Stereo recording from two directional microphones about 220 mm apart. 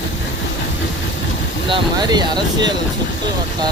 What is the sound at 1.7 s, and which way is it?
Speech, 20° right (ahead or behind).